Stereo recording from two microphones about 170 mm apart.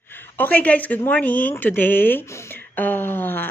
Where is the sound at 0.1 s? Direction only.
10° left (ahead or behind).